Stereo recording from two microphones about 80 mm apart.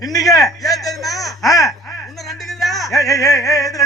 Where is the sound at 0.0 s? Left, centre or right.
Left.